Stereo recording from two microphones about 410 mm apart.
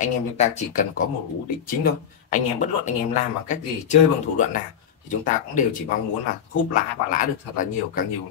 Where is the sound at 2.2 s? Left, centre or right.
Centre.